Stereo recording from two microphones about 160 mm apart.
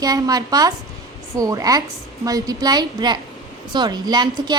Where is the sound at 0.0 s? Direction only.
25° right (ahead or behind).